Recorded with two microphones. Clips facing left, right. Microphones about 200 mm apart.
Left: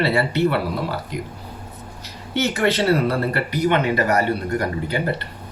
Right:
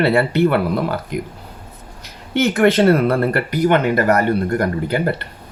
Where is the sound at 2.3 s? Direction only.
55° right (ahead or behind).